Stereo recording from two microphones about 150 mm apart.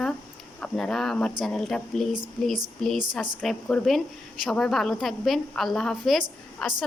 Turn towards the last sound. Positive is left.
turn(degrees=0)  # may be behind; listen again after turning